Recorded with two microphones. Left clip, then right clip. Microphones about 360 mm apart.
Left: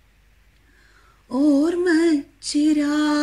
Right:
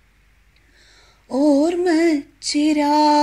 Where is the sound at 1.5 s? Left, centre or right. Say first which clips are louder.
Right 1 dB; centre.